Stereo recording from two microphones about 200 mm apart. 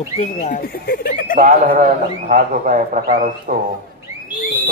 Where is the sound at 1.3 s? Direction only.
45° right (ahead or behind).